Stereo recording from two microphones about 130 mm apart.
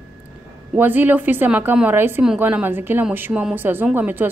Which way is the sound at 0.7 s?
15° right (ahead or behind).